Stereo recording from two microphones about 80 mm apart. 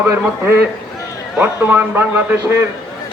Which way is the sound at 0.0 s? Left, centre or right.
Right.